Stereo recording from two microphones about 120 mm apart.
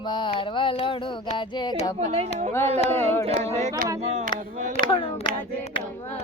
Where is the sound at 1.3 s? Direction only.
40° left (ahead or behind).